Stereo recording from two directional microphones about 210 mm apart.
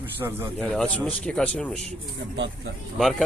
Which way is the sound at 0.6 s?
5° left (ahead or behind).